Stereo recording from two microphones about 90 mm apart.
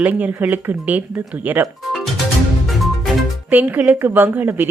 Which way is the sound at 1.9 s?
Centre (ahead or behind).